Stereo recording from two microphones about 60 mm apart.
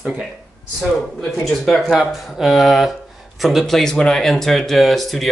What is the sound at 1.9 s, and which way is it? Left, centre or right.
Speech, centre.